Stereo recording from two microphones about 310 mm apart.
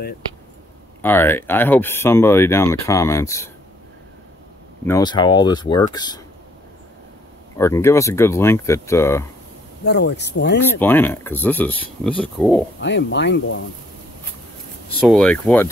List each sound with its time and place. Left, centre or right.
1.0 s speech: centre
4.8 s speech: centre
7.5 s speech: centre
9.8 s speech: left
10.8 s speech: centre
12.8 s speech: left
15.0 s speech: centre